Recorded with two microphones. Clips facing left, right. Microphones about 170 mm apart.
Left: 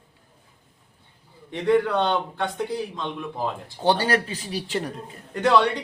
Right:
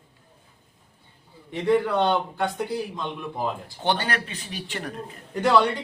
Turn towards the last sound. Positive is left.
turn(degrees=0)  # may be behind; listen again after turning